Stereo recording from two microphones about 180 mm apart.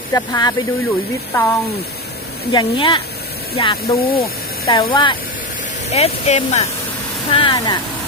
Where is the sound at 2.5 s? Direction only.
25° left (ahead or behind).